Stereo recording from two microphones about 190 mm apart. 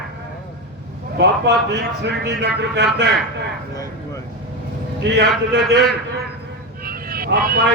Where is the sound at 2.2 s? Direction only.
60° right (ahead or behind).